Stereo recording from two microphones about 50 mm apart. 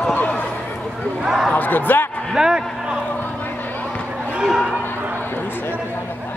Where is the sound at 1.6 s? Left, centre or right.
Left.